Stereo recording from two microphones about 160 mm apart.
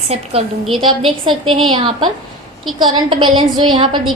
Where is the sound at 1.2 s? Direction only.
30° right (ahead or behind).